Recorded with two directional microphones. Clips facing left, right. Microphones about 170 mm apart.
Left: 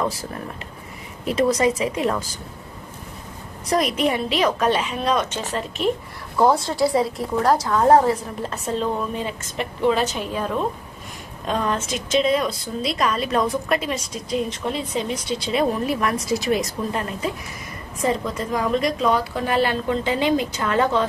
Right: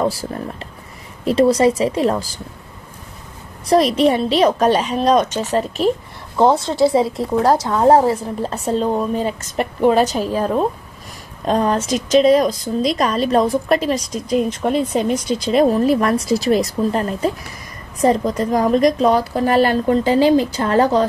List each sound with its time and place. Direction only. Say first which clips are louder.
0.0 s a woman's voice: right 5 dB; 30° right (ahead or behind)
3.6 s a woman's voice: right 7 dB; 30° right (ahead or behind)
6.3 s a woman's voice: right 3 dB; 25° right (ahead or behind)